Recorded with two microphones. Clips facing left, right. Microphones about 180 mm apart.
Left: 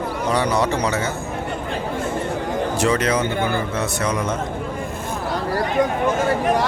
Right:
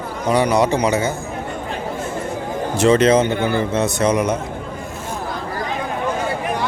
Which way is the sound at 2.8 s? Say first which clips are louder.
Right 8 dB; 25° right (ahead or behind).